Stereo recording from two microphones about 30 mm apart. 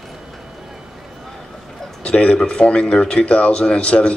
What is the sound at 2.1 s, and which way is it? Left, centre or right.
Speech, left.